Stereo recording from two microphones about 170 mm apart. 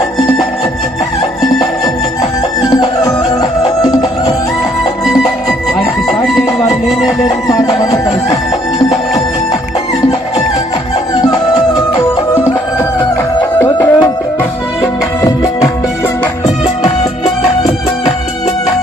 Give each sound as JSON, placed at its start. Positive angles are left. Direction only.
{"t": 2.6, "sound": "music", "side_deg": 25}
{"t": 6.1, "sound": "chicken", "side_deg": 0}
{"t": 6.7, "sound": "music", "side_deg": 0}
{"t": 7.4, "sound": "music", "side_deg": 20}
{"t": 13.6, "sound": "music", "side_deg": 15}
{"t": 15.2, "sound": "music", "side_deg": 20}